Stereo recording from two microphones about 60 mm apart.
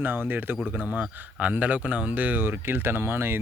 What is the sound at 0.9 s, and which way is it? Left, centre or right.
Speech, right.